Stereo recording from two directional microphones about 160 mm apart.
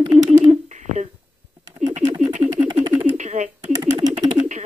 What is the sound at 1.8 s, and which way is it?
Typing, 50° right (ahead or behind).